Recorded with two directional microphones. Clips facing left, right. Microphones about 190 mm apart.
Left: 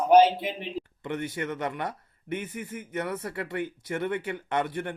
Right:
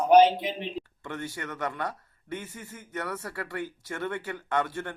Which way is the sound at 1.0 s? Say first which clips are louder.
Left 7 dB; 20° left (ahead or behind).